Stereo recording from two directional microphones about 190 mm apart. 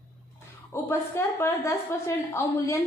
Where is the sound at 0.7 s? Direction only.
15° left (ahead or behind).